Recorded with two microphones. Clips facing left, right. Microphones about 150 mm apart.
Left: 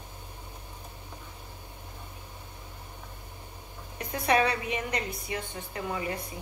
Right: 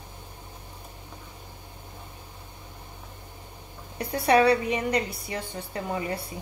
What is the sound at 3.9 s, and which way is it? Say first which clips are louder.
A woman's voice: right 5 dB; 35° right (ahead or behind).